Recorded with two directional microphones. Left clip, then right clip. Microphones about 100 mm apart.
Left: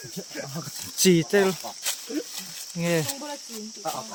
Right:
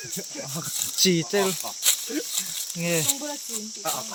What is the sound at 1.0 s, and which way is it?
Speech, 30° left (ahead or behind).